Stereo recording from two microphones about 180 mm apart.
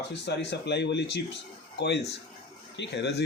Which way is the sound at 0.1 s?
75° left (ahead or behind).